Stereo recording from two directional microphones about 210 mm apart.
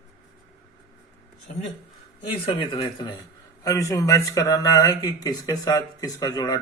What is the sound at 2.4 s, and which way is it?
Speech, 20° left (ahead or behind).